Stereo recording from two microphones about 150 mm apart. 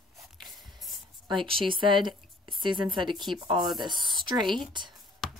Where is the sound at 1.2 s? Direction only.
35° right (ahead or behind).